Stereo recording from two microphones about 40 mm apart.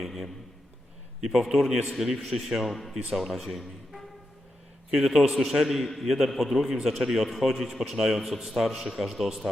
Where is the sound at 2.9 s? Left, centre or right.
Centre.